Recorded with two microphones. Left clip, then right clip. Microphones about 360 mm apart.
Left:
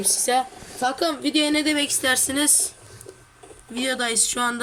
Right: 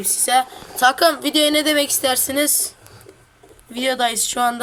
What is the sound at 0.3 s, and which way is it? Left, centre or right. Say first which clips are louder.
Speech: right 6 dB; right.